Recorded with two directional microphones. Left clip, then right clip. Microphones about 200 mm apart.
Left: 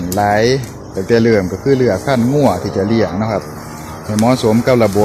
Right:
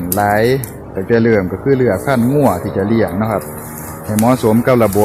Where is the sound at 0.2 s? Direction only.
5° left (ahead or behind).